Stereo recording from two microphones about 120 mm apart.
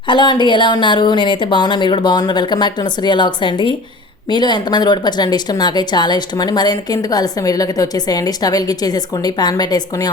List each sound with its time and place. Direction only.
0.1 s speech: 40° left (ahead or behind)